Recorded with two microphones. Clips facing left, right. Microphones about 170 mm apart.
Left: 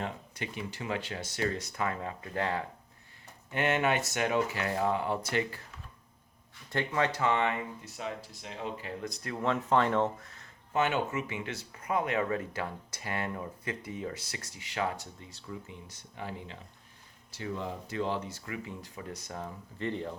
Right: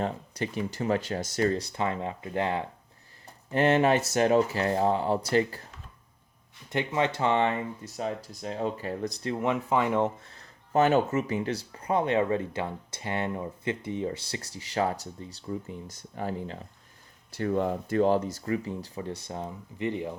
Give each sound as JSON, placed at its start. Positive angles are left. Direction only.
{"t": 0.0, "sound": "speech", "side_deg": -40}
{"t": 3.5, "sound": "speech", "side_deg": -35}
{"t": 6.7, "sound": "speech", "side_deg": -20}
{"t": 9.3, "sound": "speech", "side_deg": -15}
{"t": 10.2, "sound": "speech", "side_deg": -35}
{"t": 17.3, "sound": "speech", "side_deg": -55}